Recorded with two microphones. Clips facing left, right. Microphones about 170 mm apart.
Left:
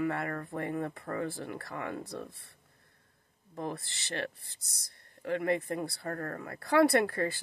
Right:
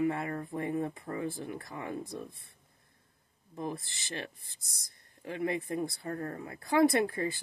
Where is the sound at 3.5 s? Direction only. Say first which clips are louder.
Even; 55° left (ahead or behind).